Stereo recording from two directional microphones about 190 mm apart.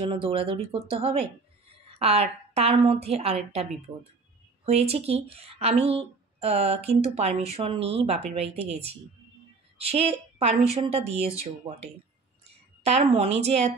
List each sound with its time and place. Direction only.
0.0 s a woman's voice: 25° right (ahead or behind)